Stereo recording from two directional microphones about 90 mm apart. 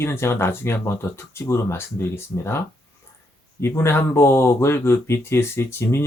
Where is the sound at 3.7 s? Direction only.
25° left (ahead or behind).